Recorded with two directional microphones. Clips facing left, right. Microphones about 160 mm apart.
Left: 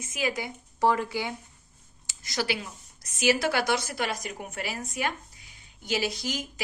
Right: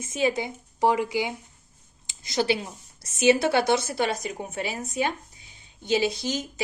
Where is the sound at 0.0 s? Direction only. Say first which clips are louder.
Right 6 dB; 30° right (ahead or behind).